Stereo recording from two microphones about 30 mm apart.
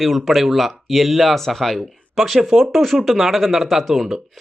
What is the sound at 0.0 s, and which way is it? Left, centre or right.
Speech, centre.